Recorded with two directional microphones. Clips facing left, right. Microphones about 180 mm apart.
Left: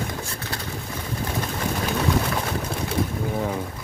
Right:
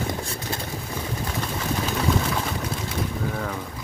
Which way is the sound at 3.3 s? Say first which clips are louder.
Left 4 dB; 20° left (ahead or behind).